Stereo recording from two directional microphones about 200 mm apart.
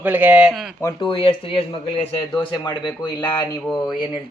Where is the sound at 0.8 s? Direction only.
25° left (ahead or behind).